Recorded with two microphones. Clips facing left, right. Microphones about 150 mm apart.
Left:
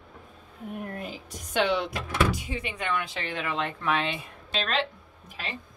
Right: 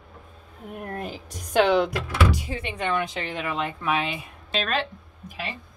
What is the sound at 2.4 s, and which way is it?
Speech, 25° right (ahead or behind).